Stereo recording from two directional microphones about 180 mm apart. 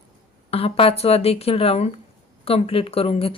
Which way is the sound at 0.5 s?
35° left (ahead or behind).